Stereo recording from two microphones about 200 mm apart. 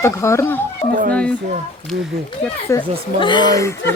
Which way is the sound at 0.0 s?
15° left (ahead or behind).